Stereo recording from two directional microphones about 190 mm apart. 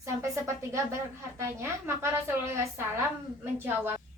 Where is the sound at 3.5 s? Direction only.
10° right (ahead or behind).